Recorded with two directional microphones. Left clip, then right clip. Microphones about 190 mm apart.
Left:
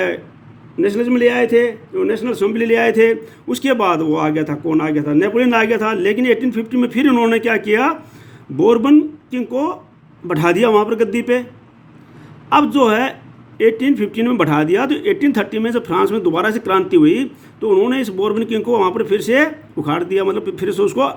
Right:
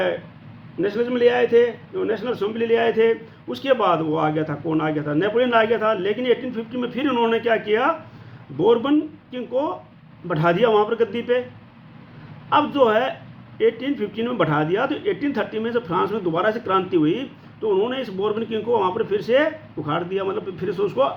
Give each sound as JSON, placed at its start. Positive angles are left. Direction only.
{"t": 0.8, "sound": "a man's voice", "side_deg": 50}
{"t": 12.5, "sound": "speech", "side_deg": 55}